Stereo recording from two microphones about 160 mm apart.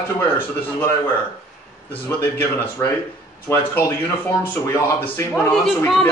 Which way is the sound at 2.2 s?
15° left (ahead or behind).